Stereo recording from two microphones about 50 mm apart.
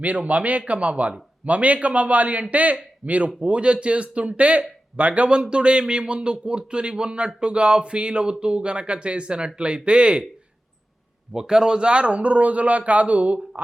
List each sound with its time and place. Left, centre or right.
0.0 s speech: right
11.3 s speech: centre